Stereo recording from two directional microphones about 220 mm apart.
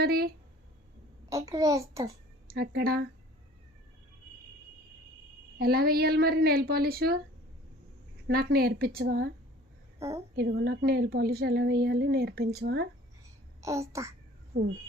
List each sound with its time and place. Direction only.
0.0 s a woman's voice: 45° right (ahead or behind)
1.3 s a child's voice: 15° right (ahead or behind)
2.5 s a woman's voice: 45° right (ahead or behind)
5.5 s a woman's voice: 45° right (ahead or behind)
8.3 s a woman's voice: 45° right (ahead or behind)
10.3 s a woman's voice: 50° right (ahead or behind)
13.6 s a child's voice: 15° right (ahead or behind)